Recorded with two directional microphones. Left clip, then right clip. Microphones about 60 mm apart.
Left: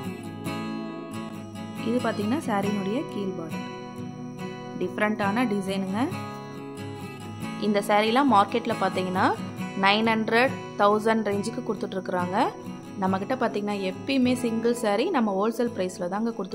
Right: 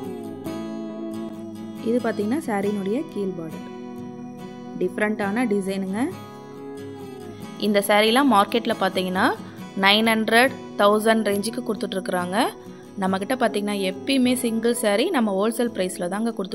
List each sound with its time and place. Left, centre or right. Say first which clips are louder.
1.9 s speech: right 3 dB; right
4.7 s speech: right 3 dB; right
7.6 s a woman's voice: right 4 dB; right